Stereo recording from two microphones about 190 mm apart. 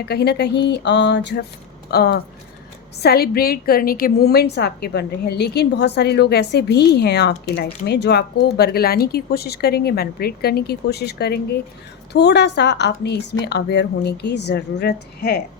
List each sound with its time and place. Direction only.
0.0 s a woman's voice: 55° left (ahead or behind)